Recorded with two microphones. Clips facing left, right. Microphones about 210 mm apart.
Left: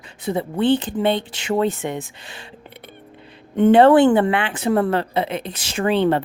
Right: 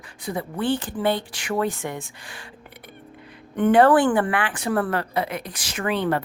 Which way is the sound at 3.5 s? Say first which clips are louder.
Left 4 dB; 25° left (ahead or behind).